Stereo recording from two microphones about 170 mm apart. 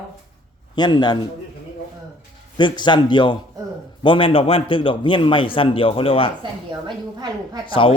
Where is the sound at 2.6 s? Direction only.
25° left (ahead or behind).